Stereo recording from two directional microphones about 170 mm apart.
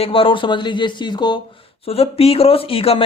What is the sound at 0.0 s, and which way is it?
Speech, 30° left (ahead or behind).